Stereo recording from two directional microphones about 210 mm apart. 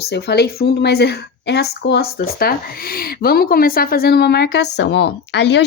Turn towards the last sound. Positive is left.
turn(degrees=55)  # may be behind; listen again after turning